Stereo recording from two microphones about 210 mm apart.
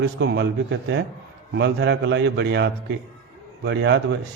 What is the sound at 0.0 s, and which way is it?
A man's voice, 55° right (ahead or behind).